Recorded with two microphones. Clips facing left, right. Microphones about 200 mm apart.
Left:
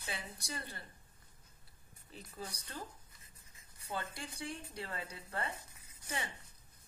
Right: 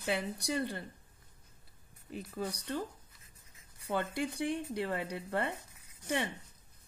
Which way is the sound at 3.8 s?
65° right (ahead or behind).